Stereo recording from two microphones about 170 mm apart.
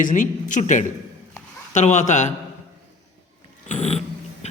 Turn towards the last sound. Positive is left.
turn(degrees=40)  # may be behind; listen again after turning